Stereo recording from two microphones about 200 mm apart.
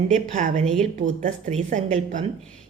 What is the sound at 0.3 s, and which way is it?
A woman's voice, 40° right (ahead or behind).